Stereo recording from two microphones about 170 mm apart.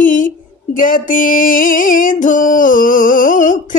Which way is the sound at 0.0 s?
50° left (ahead or behind).